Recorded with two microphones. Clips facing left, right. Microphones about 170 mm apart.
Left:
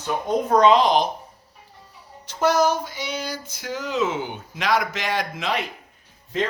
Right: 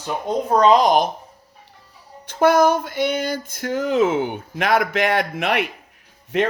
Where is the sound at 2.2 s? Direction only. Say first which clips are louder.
Right 4 dB; 55° right (ahead or behind).